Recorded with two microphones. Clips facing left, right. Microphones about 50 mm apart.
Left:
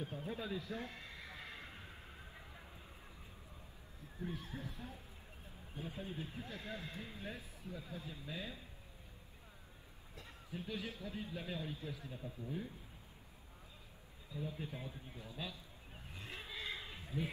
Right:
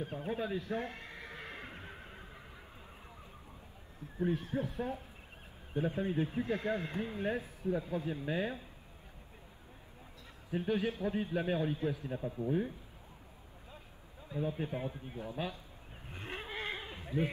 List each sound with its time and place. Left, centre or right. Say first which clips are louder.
0.0 s neigh: right 7 dB; right
4.2 s speech: right 12 dB; right
10.5 s speech: right 11 dB; right
14.3 s speech: right 9 dB; right
16.1 s neigh: right 7 dB; right